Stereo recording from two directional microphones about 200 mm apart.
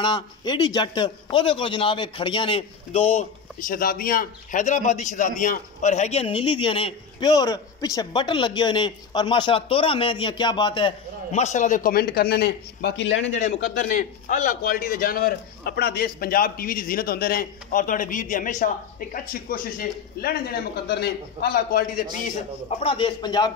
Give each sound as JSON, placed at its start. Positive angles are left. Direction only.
{"t": 0.0, "sound": "a man's voice", "side_deg": 20}
{"t": 13.4, "sound": "a man's voice", "side_deg": 40}
{"t": 22.3, "sound": "a man's voice", "side_deg": 30}